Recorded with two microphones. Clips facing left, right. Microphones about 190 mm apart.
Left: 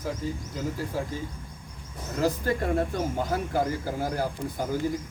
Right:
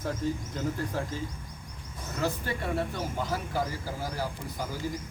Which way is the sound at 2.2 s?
40° left (ahead or behind).